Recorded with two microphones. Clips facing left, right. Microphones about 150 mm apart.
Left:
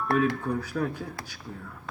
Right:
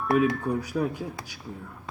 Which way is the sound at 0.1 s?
5° right (ahead or behind).